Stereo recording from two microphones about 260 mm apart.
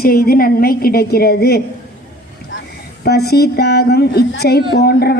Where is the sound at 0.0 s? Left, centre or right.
Left.